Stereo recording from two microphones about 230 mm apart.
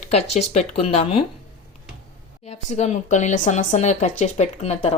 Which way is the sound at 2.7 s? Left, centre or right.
Left.